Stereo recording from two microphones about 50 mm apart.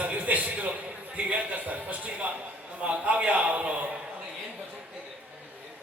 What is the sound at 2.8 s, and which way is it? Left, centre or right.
A man's voice, right.